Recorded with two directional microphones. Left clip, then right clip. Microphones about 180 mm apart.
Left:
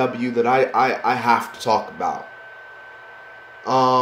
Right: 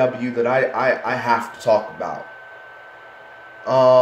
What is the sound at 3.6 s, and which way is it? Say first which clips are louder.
Speech: right 3 dB; 40° left (ahead or behind).